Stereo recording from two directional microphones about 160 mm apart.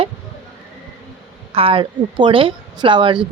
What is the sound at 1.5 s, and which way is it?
A woman's voice, 35° right (ahead or behind).